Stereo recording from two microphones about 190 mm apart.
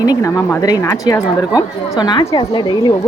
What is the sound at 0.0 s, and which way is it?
A woman's voice, 20° left (ahead or behind).